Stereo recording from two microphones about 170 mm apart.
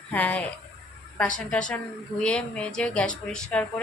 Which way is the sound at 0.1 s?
10° left (ahead or behind).